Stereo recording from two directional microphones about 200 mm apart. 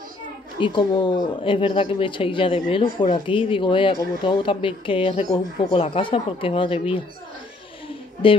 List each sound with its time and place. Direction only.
0.6 s speech: 25° left (ahead or behind)